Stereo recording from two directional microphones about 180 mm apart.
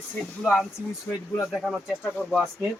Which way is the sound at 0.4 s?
5° left (ahead or behind).